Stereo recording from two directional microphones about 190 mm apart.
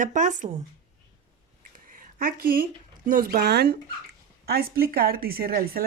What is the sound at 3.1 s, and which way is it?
Speech, 50° right (ahead or behind).